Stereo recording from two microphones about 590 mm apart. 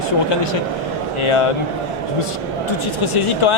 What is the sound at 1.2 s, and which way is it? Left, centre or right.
Speech, left.